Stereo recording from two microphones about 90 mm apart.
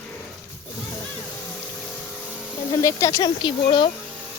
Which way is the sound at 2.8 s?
40° left (ahead or behind).